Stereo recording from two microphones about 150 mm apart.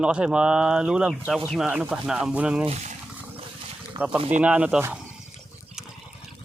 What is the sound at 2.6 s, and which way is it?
Speech, 50° right (ahead or behind).